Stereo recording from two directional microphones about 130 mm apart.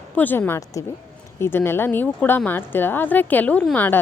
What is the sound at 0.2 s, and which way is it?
Speech, 15° left (ahead or behind).